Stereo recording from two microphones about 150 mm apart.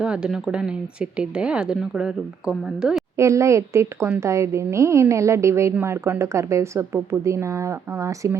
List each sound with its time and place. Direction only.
0.0 s a woman's voice: 5° right (ahead or behind)
3.2 s a woman's voice: 20° right (ahead or behind)